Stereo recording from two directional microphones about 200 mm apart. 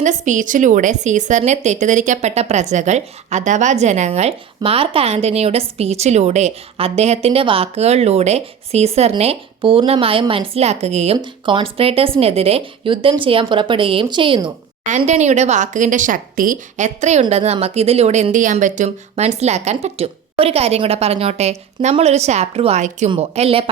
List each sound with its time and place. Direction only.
0.0 s a woman's voice: 40° right (ahead or behind)
14.8 s a woman's voice: 35° right (ahead or behind)